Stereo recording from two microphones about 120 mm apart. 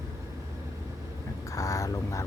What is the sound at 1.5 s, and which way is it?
Vehicle, 30° left (ahead or behind).